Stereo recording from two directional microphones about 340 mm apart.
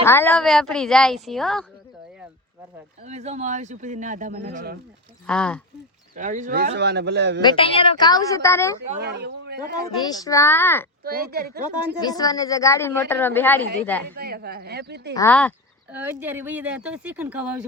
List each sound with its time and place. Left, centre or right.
0.0 s speech: centre
3.0 s speech: centre
5.2 s speech: centre
6.1 s speech: right
7.4 s a woman's voice: centre
8.9 s speech: right
10.1 s a woman's voice: centre
11.0 s speech: right
11.9 s a woman's voice: centre
14.2 s speech: right
15.1 s speech: centre